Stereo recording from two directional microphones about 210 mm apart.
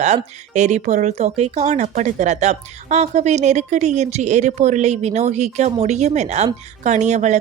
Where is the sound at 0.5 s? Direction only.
35° right (ahead or behind).